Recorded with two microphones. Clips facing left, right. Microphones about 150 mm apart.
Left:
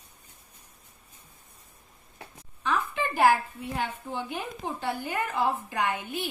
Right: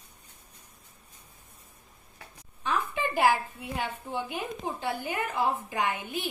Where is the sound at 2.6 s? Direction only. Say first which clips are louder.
Left 1 dB; 15° right (ahead or behind).